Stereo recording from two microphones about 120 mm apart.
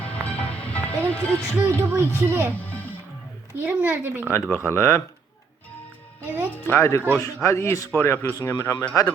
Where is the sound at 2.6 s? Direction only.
15° left (ahead or behind).